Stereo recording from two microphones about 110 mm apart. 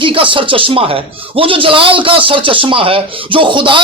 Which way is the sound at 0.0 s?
50° right (ahead or behind).